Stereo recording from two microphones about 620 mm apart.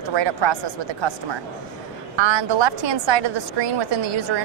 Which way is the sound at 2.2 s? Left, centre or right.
Right.